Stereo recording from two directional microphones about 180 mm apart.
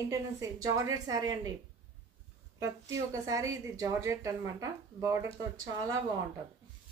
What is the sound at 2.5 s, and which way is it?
A woman's voice, 15° right (ahead or behind).